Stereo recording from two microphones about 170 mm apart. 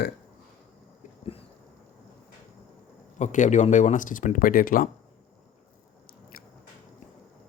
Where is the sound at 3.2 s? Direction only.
45° left (ahead or behind).